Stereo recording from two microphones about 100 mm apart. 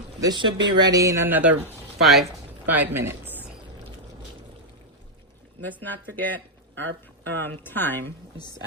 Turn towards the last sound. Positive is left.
turn(degrees=20)  # may be behind; listen again after turning